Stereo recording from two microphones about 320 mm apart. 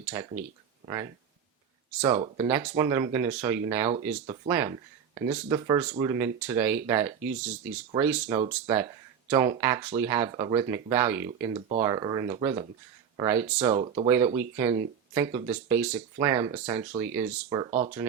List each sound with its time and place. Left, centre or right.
0.0 s speech: centre
2.0 s speech: centre